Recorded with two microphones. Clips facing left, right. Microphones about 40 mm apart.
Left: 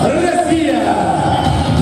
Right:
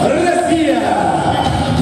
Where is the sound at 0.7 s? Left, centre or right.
Centre.